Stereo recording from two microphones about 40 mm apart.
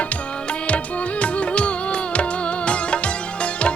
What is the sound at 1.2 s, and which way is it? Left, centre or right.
Music, left.